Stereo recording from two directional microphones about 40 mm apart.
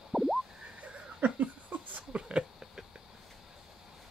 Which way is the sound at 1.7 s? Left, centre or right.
Right.